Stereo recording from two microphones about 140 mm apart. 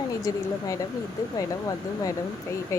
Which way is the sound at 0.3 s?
25° left (ahead or behind).